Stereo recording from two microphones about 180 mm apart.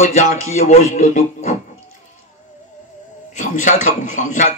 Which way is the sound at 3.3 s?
45° left (ahead or behind).